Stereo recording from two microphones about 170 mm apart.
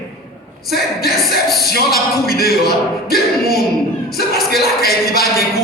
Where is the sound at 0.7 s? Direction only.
65° left (ahead or behind).